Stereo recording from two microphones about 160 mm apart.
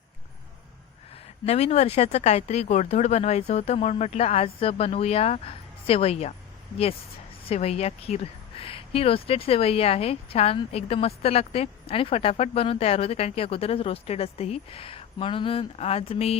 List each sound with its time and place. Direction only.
1.5 s speech: 40° left (ahead or behind)
7.4 s speech: 40° left (ahead or behind)